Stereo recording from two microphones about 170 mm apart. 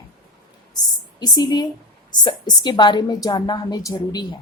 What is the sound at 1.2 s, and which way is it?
A woman's voice, 25° left (ahead or behind).